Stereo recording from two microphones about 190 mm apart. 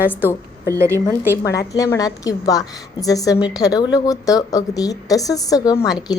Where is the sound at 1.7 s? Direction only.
15° left (ahead or behind).